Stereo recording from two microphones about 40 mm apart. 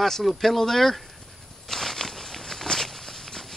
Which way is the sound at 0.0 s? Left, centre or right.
Centre.